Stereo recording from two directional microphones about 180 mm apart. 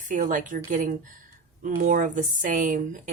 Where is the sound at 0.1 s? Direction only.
45° right (ahead or behind).